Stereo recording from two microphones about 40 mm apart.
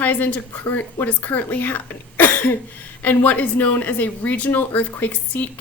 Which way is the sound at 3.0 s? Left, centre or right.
Left.